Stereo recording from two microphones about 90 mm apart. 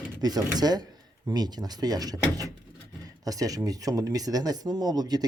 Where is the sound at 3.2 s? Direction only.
40° right (ahead or behind).